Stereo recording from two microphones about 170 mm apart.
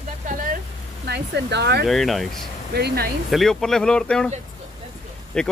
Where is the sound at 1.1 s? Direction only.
80° right.